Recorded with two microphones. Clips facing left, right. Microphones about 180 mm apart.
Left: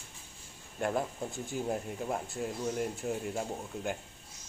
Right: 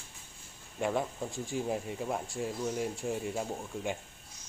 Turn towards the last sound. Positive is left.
turn(degrees=0)  # may be behind; listen again after turning